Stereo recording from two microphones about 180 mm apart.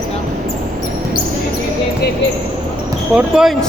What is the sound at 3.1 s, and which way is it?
Speech, centre (ahead or behind).